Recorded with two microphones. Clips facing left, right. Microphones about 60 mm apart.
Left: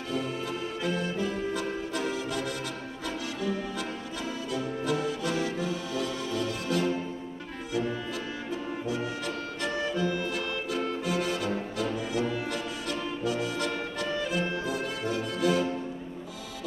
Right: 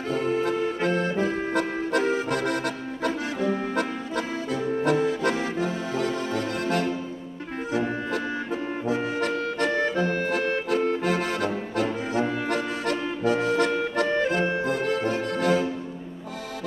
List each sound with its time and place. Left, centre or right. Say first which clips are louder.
0.1 s music: right 8 dB; right
2.1 s accordion: right 7 dB; right
4.5 s music: right 6 dB; right